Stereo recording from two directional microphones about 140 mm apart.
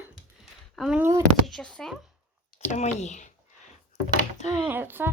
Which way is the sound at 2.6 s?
55° left (ahead or behind).